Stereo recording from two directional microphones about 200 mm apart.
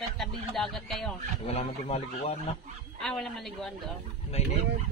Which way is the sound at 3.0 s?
Centre (ahead or behind).